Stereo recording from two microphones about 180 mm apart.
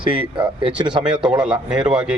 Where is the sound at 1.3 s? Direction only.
5° right (ahead or behind).